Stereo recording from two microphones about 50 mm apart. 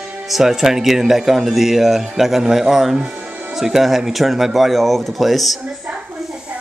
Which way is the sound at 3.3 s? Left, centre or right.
Right.